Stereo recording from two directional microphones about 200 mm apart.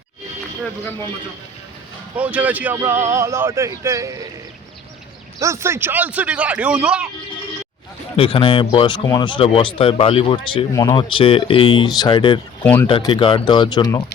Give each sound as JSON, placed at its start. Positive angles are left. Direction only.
{"t": 2.1, "sound": "speech", "side_deg": -5}
{"t": 5.4, "sound": "speech", "side_deg": -15}
{"t": 8.1, "sound": "speech", "side_deg": 25}
{"t": 12.6, "sound": "speech", "side_deg": 10}
{"t": 12.9, "sound": "speech", "side_deg": 25}